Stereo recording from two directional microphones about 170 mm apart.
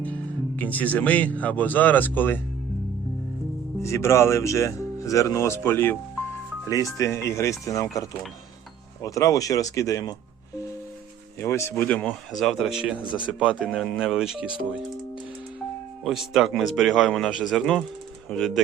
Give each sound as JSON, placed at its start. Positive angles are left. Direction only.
{"t": 0.0, "sound": "speech", "side_deg": 10}
{"t": 3.8, "sound": "speech", "side_deg": 15}
{"t": 9.0, "sound": "speech", "side_deg": 20}
{"t": 11.3, "sound": "speech", "side_deg": 15}
{"t": 13.7, "sound": "speech", "side_deg": 5}
{"t": 13.9, "sound": "speech", "side_deg": -5}
{"t": 16.0, "sound": "speech", "side_deg": -5}